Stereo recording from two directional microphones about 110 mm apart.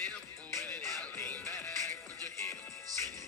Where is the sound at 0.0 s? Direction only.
15° left (ahead or behind).